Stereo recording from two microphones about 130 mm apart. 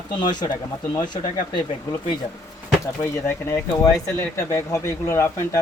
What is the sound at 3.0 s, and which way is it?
Speech, 20° left (ahead or behind).